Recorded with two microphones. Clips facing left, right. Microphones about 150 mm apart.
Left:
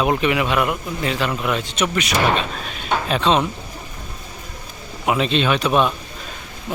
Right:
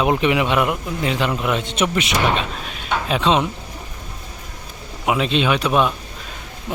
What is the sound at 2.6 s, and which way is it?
Speech, 10° right (ahead or behind).